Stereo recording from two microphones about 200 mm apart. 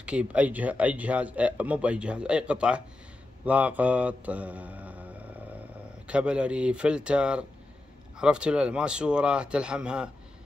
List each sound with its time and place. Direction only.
0.0 s a man's voice: 5° right (ahead or behind)